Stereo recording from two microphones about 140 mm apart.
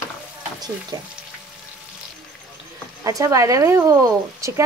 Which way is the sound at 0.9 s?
25° right (ahead or behind).